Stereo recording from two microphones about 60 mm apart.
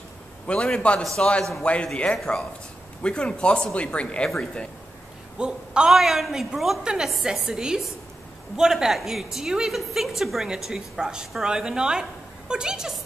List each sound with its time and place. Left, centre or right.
0.5 s speech: centre
5.4 s a woman's voice: centre